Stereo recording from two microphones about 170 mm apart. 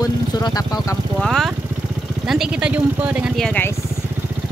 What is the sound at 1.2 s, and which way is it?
Speech, centre (ahead or behind).